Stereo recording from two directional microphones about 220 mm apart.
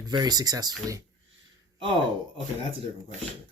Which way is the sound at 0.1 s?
20° right (ahead or behind).